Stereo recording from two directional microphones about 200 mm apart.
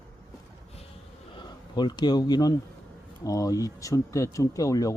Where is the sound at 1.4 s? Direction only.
20° left (ahead or behind).